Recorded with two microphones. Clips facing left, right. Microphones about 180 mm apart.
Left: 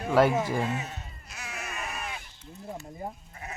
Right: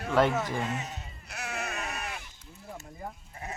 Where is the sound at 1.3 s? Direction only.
65° right (ahead or behind).